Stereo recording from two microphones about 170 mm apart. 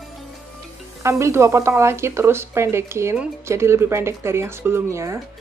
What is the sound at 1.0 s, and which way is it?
A woman's voice, 15° right (ahead or behind).